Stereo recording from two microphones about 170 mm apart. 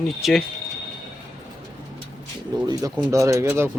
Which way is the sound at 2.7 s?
20° right (ahead or behind).